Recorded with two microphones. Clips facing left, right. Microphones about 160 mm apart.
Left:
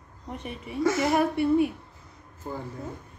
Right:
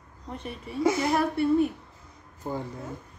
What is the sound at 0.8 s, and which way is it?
Speech, 15° right (ahead or behind).